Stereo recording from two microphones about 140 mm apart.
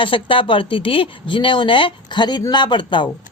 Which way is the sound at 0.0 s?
40° left (ahead or behind).